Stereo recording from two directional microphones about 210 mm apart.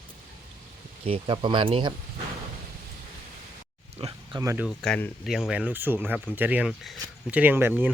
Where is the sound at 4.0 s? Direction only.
25° right (ahead or behind).